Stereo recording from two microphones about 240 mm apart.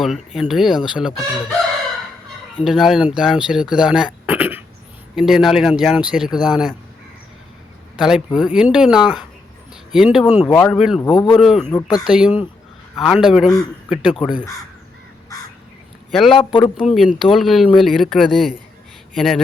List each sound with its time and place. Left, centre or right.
0.0 s speech: centre
2.6 s speech: centre
7.9 s a man's voice: centre
11.0 s speech: centre
11.3 s speech: centre
14.1 s speech: centre
16.1 s speech: centre
16.6 s speech: left
16.9 s speech: centre